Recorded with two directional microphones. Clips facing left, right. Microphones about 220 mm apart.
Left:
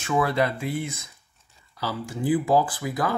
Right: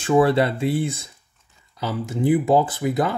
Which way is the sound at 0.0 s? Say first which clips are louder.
Right 6 dB; 30° right (ahead or behind).